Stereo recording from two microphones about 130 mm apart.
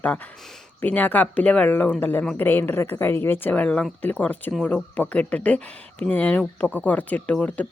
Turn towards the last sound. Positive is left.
turn(degrees=10)  # may be behind; listen again after turning